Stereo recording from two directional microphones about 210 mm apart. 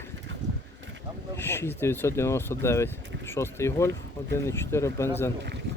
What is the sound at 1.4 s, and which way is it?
Speech, 10° left (ahead or behind).